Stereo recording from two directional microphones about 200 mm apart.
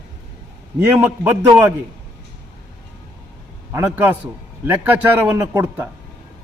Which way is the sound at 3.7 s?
10° right (ahead or behind).